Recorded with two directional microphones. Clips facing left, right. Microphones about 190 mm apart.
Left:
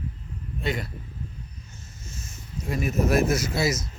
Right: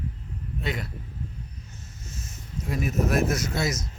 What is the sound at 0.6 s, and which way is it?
Speech, centre (ahead or behind).